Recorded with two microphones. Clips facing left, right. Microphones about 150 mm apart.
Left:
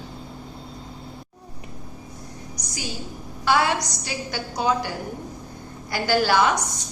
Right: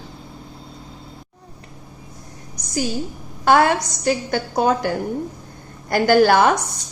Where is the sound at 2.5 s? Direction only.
50° right (ahead or behind).